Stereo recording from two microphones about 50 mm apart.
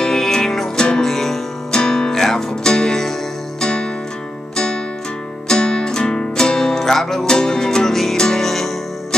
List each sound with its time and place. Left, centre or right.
0.0 s music: centre
5.5 s music: centre